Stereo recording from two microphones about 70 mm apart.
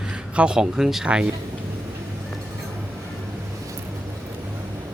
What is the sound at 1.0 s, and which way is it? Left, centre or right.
Speech, centre.